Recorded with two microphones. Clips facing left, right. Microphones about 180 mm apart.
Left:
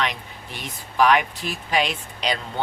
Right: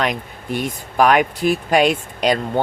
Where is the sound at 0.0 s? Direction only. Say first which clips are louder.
Right 5 dB; 50° right (ahead or behind).